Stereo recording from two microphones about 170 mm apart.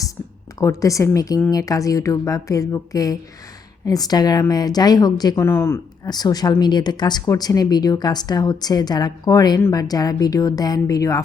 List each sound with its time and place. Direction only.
0.6 s a woman's voice: 20° left (ahead or behind)